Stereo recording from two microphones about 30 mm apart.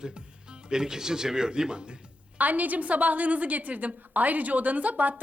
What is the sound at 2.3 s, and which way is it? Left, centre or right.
A woman's voice, right.